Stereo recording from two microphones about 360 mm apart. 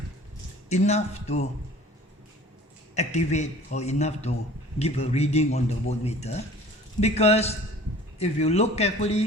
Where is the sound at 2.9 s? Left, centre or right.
Centre.